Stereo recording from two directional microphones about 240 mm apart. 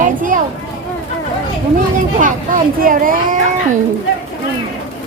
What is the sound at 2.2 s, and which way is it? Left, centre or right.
Speech, right.